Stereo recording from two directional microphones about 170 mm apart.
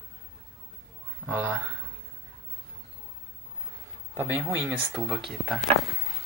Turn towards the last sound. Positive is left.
turn(degrees=0)  # may be behind; listen again after turning